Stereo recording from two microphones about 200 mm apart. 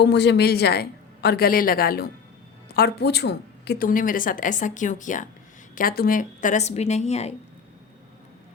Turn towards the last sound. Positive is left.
turn(degrees=30)  # may be behind; listen again after turning